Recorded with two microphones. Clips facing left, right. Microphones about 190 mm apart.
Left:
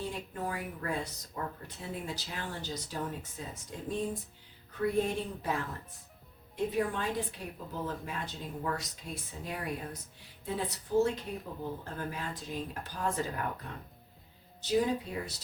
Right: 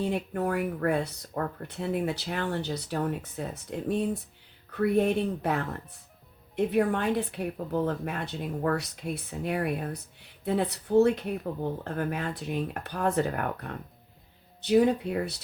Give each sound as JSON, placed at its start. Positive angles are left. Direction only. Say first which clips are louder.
{"t": 0.0, "sound": "a woman's voice", "louder": "right 9 dB", "side_deg": -65}
{"t": 6.7, "sound": "a woman's voice", "louder": "right 7 dB", "side_deg": -65}
{"t": 14.6, "sound": "a woman's voice", "louder": "right 7 dB", "side_deg": -65}